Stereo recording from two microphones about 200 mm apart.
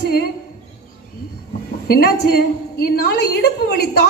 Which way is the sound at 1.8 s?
50° left (ahead or behind).